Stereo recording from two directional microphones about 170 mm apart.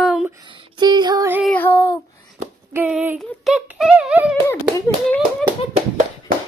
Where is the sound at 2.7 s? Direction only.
10° right (ahead or behind).